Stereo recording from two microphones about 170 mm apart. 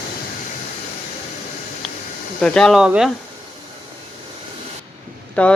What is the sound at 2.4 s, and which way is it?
Speech, 5° left (ahead or behind).